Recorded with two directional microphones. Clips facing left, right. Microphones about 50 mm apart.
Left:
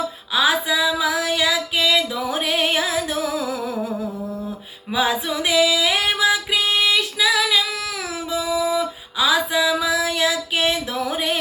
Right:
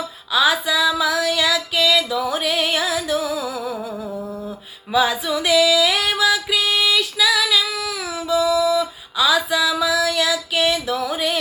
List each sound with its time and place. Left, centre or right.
0.3 s a sound: left
2.3 s music: left
4.9 s music: left